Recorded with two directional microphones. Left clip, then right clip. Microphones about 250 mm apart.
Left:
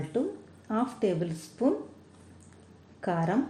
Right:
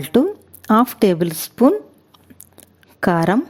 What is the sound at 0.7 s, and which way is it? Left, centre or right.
Speech, right.